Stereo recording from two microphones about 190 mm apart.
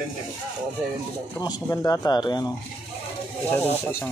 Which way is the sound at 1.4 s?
20° left (ahead or behind).